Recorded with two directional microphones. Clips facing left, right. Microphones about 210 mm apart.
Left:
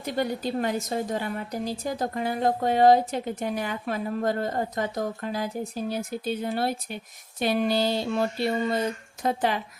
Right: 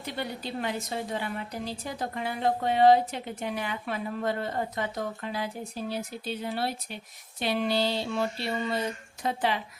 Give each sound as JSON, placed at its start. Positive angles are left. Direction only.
{"t": 0.0, "sound": "a woman's voice", "side_deg": 45}